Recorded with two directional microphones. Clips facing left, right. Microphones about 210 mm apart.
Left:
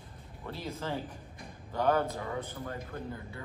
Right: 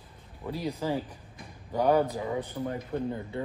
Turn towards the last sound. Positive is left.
turn(degrees=-20)  # may be behind; listen again after turning